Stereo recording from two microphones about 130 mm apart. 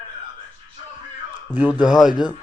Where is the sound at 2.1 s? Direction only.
35° left (ahead or behind).